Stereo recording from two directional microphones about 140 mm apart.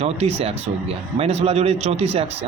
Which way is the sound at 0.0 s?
50° right (ahead or behind).